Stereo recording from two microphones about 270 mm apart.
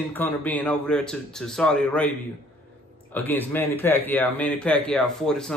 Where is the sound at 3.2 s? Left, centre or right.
Centre.